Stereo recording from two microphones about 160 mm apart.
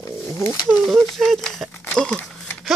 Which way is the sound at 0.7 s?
5° left (ahead or behind).